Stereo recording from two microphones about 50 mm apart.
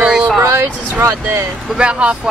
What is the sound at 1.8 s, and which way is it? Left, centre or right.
Speech, right.